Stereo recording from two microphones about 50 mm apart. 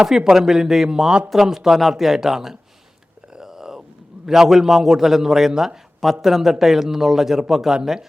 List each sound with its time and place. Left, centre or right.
0.0 s a man's voice: centre
3.3 s a sound: centre
4.3 s a man's voice: centre